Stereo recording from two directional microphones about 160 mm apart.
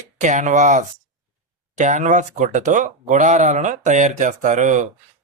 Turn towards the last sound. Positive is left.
turn(degrees=-50)  # may be behind; listen again after turning